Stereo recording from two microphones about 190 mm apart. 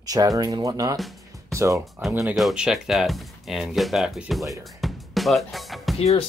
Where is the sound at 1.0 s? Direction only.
Centre (ahead or behind).